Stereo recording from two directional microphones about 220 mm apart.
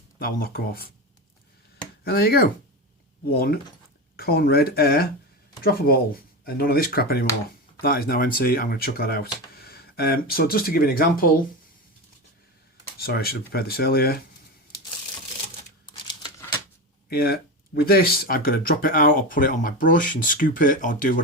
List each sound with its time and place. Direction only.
0.2 s speech: 40° left (ahead or behind)
2.0 s speech: 45° left (ahead or behind)
6.4 s speech: 45° left (ahead or behind)
13.0 s speech: 45° left (ahead or behind)
16.0 s a sound: 20° left (ahead or behind)
17.1 s speech: 45° left (ahead or behind)